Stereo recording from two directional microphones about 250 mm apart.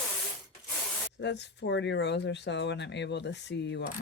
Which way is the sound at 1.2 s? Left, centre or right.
Left.